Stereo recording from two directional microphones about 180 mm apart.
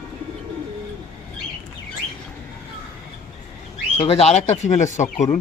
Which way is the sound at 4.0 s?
30° left (ahead or behind).